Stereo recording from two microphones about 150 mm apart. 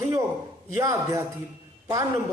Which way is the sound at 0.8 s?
20° right (ahead or behind).